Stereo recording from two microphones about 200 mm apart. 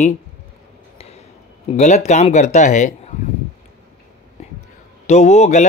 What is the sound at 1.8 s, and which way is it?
Speech, 35° left (ahead or behind).